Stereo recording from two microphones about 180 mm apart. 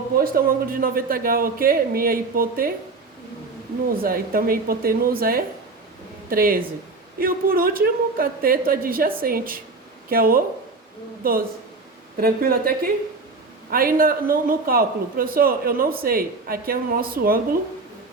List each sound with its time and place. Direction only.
0.3 s speech: 55° right (ahead or behind)
3.9 s a man's voice: 55° right (ahead or behind)